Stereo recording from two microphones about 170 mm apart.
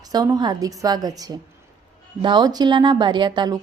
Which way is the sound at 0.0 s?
20° right (ahead or behind).